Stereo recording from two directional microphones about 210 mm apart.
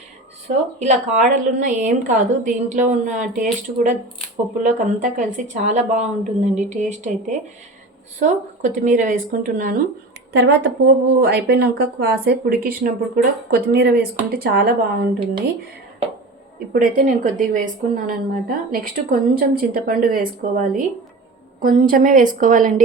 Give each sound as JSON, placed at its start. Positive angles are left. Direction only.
{"t": 0.4, "sound": "speech", "side_deg": -35}
{"t": 16.7, "sound": "speech", "side_deg": -40}